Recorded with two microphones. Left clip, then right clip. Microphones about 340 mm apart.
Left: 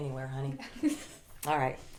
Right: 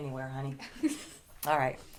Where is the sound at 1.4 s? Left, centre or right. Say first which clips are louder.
Right 1 dB; right.